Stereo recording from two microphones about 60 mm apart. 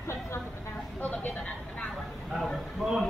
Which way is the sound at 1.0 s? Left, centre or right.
Left.